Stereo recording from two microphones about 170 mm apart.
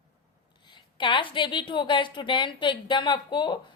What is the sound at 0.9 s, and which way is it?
A woman's voice, 30° left (ahead or behind).